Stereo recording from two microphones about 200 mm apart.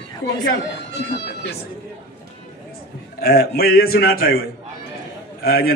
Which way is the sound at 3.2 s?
50° left (ahead or behind).